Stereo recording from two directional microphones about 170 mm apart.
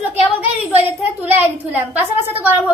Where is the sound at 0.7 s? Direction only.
10° right (ahead or behind).